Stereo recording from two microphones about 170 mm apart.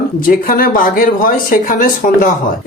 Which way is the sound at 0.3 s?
55° left (ahead or behind).